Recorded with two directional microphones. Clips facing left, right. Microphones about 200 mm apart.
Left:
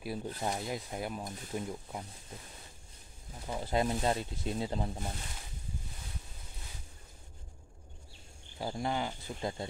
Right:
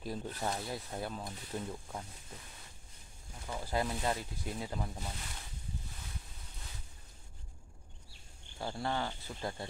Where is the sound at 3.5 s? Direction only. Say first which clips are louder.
Left 4 dB; 20° left (ahead or behind).